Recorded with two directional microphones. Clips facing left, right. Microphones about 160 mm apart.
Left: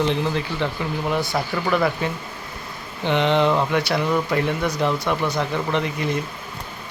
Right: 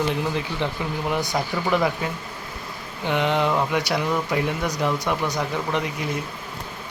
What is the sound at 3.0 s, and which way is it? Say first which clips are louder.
Speech: left 3 dB; 10° right (ahead or behind).